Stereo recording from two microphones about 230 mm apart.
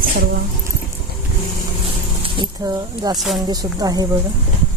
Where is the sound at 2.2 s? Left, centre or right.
Centre.